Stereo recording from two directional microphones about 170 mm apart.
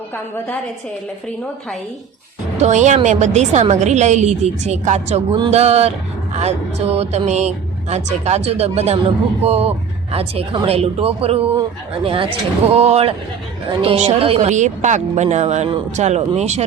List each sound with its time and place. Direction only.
2.6 s a woman's voice: 45° right (ahead or behind)